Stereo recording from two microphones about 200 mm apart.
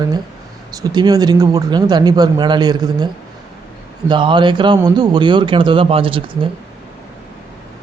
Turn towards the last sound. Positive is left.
turn(degrees=-25)  # may be behind; listen again after turning